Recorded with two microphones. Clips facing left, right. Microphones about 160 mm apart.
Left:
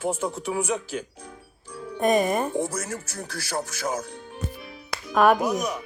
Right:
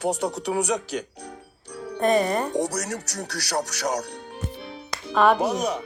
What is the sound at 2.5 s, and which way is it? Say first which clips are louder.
Speech: right 2 dB; 75° right (ahead or behind).